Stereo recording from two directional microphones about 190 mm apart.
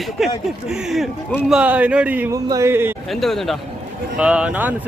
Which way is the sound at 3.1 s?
Centre (ahead or behind).